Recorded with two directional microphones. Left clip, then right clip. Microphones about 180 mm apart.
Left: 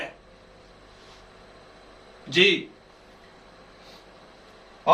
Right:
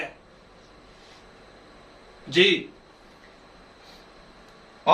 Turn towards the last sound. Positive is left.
turn(degrees=-35)  # may be behind; listen again after turning